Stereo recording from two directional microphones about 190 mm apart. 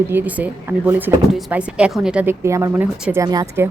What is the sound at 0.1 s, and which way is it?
Speech, 10° right (ahead or behind).